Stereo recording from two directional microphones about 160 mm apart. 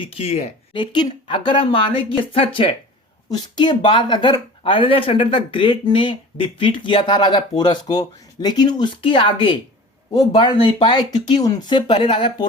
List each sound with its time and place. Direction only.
0.0 s speech: 40° left (ahead or behind)
3.2 s speech: 25° left (ahead or behind)